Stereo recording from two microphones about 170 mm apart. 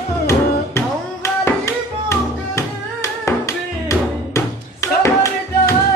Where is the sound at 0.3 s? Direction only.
15° left (ahead or behind).